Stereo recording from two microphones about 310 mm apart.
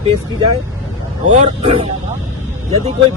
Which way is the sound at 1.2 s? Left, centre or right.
Right.